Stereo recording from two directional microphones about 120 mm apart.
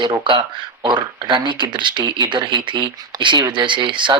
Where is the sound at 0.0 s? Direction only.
40° right (ahead or behind).